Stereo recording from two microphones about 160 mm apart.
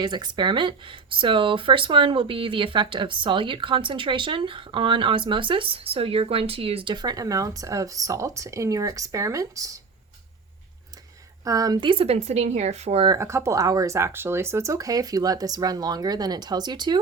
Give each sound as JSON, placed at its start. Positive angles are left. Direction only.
{"t": 0.0, "sound": "speech", "side_deg": -30}
{"t": 11.4, "sound": "speech", "side_deg": -25}
{"t": 13.1, "sound": "speech", "side_deg": -20}